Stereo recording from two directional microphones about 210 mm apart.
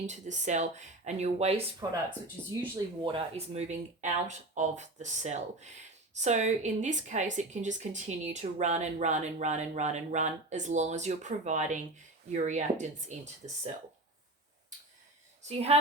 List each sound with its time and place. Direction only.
0.0 s a woman's voice: 35° right (ahead or behind)
2.4 s speech: 5° left (ahead or behind)
3.0 s a woman's voice: 25° right (ahead or behind)
15.4 s a woman's voice: 30° right (ahead or behind)